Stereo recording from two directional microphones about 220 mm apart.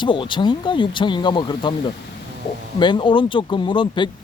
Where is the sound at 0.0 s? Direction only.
20° left (ahead or behind).